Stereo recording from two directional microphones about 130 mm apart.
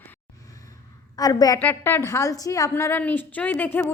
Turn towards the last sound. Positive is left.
turn(degrees=15)  # may be behind; listen again after turning